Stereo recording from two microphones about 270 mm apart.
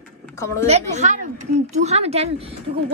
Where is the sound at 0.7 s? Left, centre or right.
Right.